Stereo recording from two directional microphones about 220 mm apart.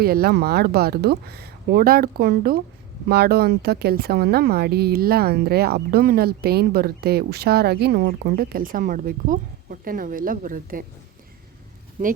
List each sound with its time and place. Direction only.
0.0 s speech: 45° right (ahead or behind)